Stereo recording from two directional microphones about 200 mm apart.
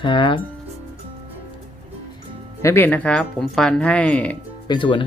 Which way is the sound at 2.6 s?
15° left (ahead or behind).